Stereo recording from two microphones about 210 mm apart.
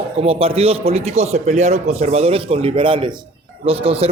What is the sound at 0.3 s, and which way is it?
A man's voice, 30° right (ahead or behind).